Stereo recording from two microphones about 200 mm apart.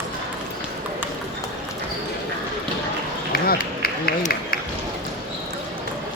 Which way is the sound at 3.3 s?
50° left (ahead or behind).